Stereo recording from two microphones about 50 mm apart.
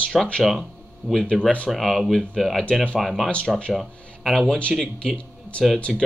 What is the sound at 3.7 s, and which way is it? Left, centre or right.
Speech, centre.